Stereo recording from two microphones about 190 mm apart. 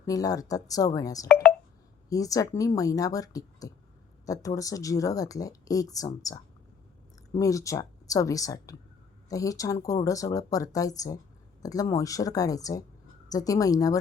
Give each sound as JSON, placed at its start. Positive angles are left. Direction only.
{"t": 0.0, "sound": "speech", "side_deg": 20}
{"t": 1.3, "sound": "speech", "side_deg": 5}
{"t": 2.0, "sound": "speech", "side_deg": 20}